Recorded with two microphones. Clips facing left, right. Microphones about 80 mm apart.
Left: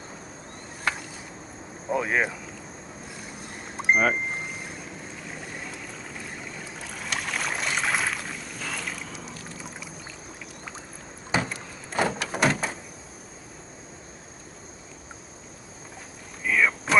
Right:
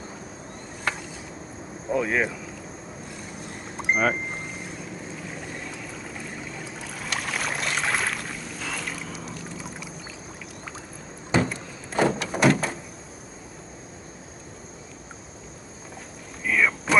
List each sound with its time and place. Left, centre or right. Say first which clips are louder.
2.0 s speech: right 1 dB; left
3.9 s speech: left 1 dB; centre
5.1 s boat: right 2 dB; centre
11.3 s sliding door: right 4 dB; centre
16.4 s a sound: even; centre